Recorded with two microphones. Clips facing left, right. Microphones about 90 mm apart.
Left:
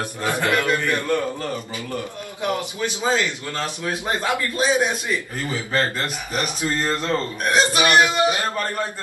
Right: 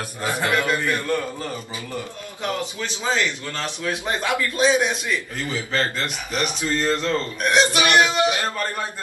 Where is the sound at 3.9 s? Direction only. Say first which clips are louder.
Even; 30° left (ahead or behind).